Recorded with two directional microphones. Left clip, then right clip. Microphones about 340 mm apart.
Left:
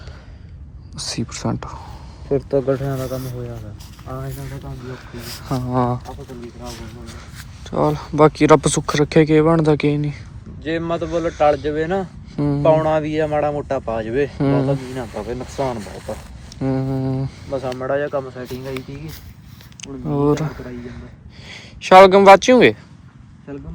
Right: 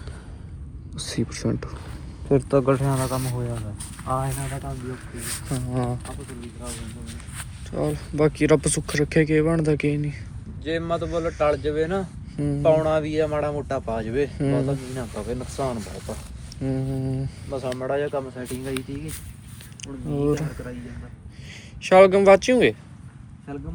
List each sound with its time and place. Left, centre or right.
0.9 s speech: centre
2.3 s speech: right
3.0 s speech: centre
4.9 s speech: centre
7.6 s speech: centre
9.8 s speech: left
10.6 s speech: left
12.4 s speech: left
12.6 s speech: left
14.3 s speech: left
14.7 s speech: left
16.9 s speech: left; by 22.5 s centre